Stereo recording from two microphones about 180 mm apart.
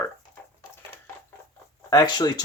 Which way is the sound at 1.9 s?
25° left (ahead or behind).